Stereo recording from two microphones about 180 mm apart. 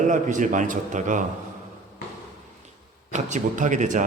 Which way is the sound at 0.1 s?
45° right (ahead or behind).